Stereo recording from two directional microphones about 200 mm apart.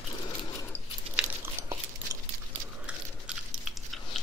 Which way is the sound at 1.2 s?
15° right (ahead or behind).